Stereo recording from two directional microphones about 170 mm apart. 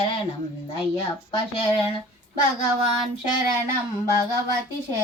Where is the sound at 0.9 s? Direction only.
30° left (ahead or behind).